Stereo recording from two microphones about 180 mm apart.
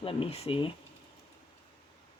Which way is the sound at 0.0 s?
30° left (ahead or behind).